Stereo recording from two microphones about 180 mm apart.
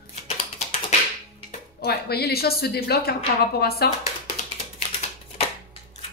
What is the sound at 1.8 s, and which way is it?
A woman's voice, 60° left (ahead or behind).